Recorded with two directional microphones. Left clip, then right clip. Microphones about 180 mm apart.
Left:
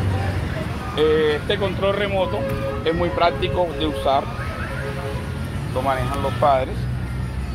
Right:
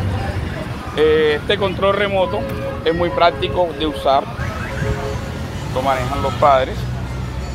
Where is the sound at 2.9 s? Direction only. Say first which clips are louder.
Right 5 dB; 5° right (ahead or behind).